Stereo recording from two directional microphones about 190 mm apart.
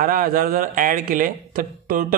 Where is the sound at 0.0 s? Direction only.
50° right (ahead or behind).